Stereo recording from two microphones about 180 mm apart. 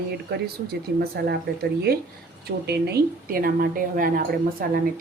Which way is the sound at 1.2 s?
65° right (ahead or behind).